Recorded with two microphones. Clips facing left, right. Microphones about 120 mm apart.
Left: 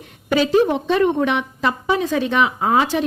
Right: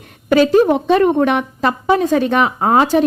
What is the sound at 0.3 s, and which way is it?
A woman's voice, 50° right (ahead or behind).